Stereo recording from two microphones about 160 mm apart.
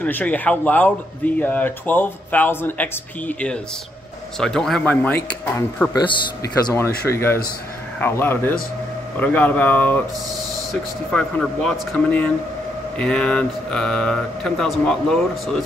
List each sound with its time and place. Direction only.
0.0 s speech: 10° left (ahead or behind)
5.9 s speech: 25° left (ahead or behind); by 15.6 s 5° left (ahead or behind)